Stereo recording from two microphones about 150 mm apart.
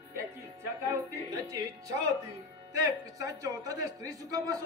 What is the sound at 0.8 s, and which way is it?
A man's voice, 20° right (ahead or behind).